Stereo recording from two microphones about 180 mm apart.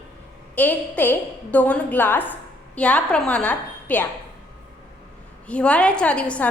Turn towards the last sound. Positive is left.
turn(degrees=5)  # may be behind; listen again after turning